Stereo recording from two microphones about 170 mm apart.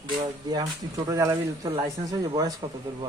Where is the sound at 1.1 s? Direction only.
20° right (ahead or behind).